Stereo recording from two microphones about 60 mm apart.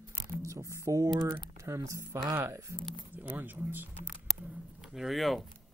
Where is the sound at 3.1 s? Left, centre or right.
Right.